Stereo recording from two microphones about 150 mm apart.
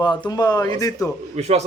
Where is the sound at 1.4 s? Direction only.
45° right (ahead or behind).